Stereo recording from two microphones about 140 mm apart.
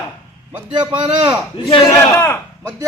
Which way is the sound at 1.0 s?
30° right (ahead or behind).